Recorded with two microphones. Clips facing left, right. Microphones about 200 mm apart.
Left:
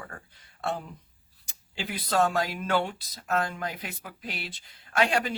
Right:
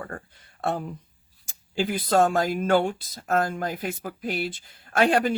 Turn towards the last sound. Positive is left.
turn(degrees=-50)  # may be behind; listen again after turning